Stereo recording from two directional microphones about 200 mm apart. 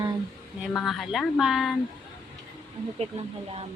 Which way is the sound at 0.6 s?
Centre (ahead or behind).